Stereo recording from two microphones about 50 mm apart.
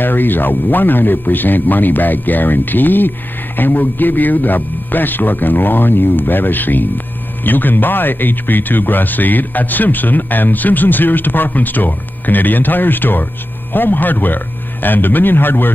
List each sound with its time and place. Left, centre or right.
0.0 s speech: left